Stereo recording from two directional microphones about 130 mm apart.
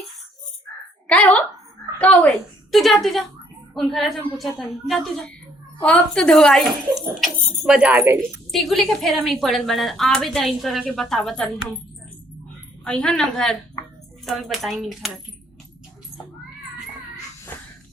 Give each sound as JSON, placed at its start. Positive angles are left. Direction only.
{"t": 1.0, "sound": "a sound", "side_deg": 10}
{"t": 2.0, "sound": "a woman's voice", "side_deg": 10}
{"t": 2.7, "sound": "a woman's voice", "side_deg": 0}
{"t": 8.5, "sound": "a woman's voice", "side_deg": 0}
{"t": 12.8, "sound": "a woman's voice", "side_deg": 5}
{"t": 13.8, "sound": "a sound", "side_deg": 30}
{"t": 14.3, "sound": "a woman's voice", "side_deg": 0}